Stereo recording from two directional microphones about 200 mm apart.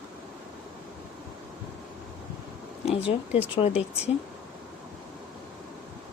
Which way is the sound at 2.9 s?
30° left (ahead or behind).